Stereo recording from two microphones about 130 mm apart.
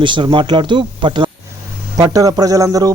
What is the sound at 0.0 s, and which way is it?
Speech, 40° right (ahead or behind).